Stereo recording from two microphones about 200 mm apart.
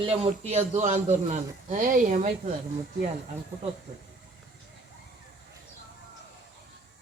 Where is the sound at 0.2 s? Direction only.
30° right (ahead or behind).